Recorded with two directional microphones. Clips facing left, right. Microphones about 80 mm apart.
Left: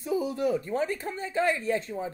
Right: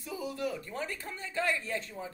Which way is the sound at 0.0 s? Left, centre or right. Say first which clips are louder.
Left 8 dB; left.